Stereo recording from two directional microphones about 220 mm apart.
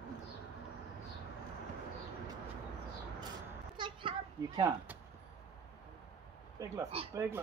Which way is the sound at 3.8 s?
20° right (ahead or behind).